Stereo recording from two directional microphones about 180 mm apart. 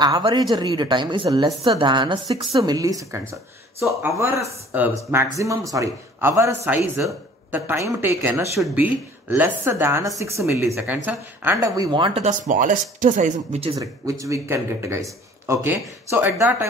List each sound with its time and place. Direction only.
0.0 s speech: 25° right (ahead or behind)
7.5 s speech: 15° right (ahead or behind); by 13.7 s 35° right (ahead or behind)
13.7 s speech: 20° right (ahead or behind)